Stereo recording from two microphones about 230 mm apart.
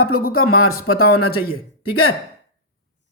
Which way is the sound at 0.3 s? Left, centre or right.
Left.